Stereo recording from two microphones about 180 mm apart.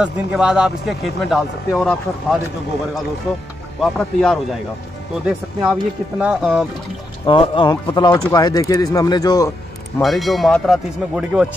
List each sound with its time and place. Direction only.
0.0 s speech: 5° right (ahead or behind)
3.8 s speech: 5° left (ahead or behind)
7.2 s speech: 30° left (ahead or behind)
10.0 s speech: centre (ahead or behind)